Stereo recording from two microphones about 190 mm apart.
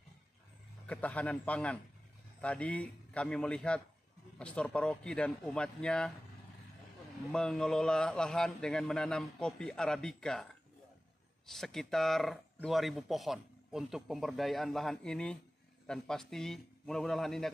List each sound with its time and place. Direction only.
0.8 s a man's voice: 5° left (ahead or behind)
7.3 s speech: 5° left (ahead or behind)